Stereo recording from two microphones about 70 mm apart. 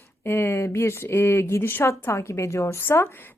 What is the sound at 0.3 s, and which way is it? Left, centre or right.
Speech, left.